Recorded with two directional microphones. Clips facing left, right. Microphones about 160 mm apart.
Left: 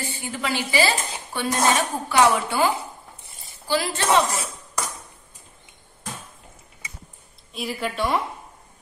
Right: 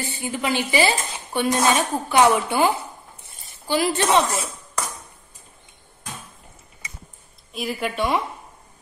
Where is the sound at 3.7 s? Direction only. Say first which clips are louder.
Right 3 dB; 20° right (ahead or behind).